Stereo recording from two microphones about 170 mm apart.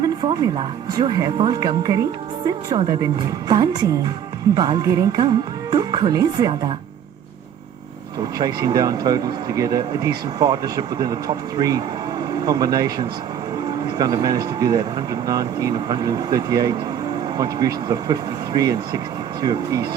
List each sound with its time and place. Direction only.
0.0 s speech: 25° right (ahead or behind)
8.4 s speech: 20° right (ahead or behind)